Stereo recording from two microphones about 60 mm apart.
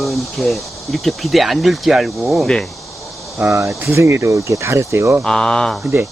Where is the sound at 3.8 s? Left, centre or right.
Right.